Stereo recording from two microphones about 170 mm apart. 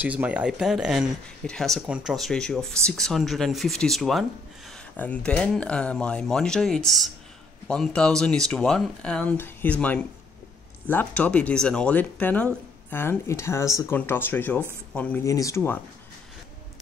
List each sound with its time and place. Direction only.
0.0 s speech: 10° right (ahead or behind); by 15.2 s 5° left (ahead or behind)
15.2 s speech: 20° left (ahead or behind)